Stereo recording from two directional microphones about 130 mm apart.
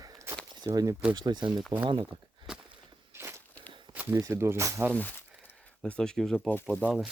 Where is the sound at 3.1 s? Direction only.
20° right (ahead or behind).